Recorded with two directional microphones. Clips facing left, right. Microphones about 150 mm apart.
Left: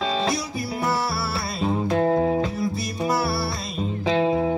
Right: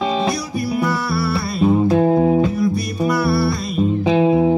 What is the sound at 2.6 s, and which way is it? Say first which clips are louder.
Music: right 7 dB; 25° left (ahead or behind).